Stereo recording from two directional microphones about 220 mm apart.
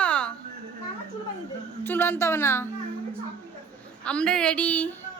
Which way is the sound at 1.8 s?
10° left (ahead or behind).